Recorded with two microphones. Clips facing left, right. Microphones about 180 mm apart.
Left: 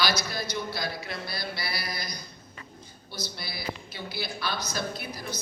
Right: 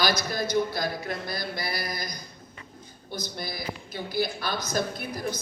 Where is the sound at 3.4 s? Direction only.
45° right (ahead or behind).